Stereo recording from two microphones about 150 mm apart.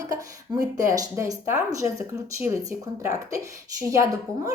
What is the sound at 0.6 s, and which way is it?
Speech, 25° right (ahead or behind).